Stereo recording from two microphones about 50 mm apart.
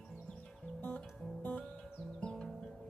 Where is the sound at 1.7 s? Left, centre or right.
Centre.